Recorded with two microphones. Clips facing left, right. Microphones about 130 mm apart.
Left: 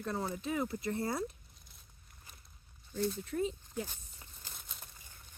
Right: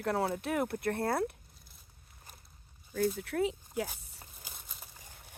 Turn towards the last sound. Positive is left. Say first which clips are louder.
# right 1 dB
turn(degrees=0)  # may be behind; listen again after turning